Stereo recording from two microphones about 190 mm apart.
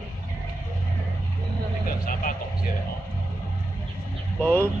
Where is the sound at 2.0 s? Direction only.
45° left (ahead or behind).